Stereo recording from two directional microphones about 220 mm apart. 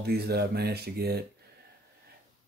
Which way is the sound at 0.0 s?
45° right (ahead or behind).